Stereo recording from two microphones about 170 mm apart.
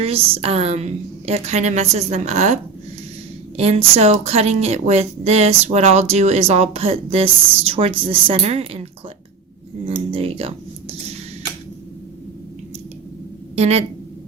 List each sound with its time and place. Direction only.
0.0 s a woman's voice: 35° right (ahead or behind)
3.6 s a woman's voice: 35° right (ahead or behind)
13.6 s a woman's voice: 40° right (ahead or behind)